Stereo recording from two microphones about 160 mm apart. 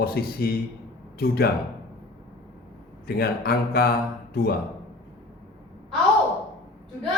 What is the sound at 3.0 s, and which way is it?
A man's voice, 75° left (ahead or behind).